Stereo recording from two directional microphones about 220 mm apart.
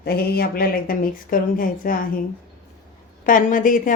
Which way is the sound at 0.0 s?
45° left (ahead or behind).